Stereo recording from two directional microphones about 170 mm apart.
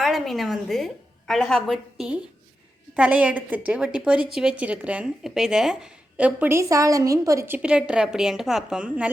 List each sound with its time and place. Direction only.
0.0 s a woman's voice: centre (ahead or behind)